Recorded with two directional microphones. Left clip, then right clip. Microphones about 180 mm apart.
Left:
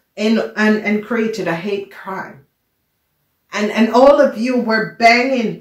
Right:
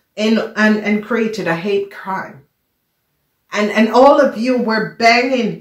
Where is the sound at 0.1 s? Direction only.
40° right (ahead or behind).